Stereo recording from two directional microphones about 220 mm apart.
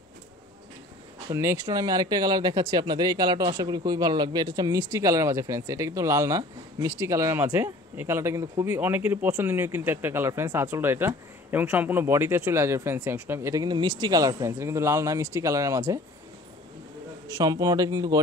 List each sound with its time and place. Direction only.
1.3 s speech: 10° right (ahead or behind)
17.4 s speech: 15° right (ahead or behind)